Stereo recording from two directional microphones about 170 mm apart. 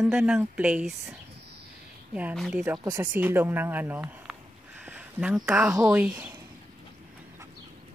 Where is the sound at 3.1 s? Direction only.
10° right (ahead or behind).